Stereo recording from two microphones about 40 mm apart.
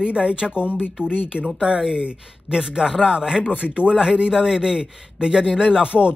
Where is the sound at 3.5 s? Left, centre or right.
Right.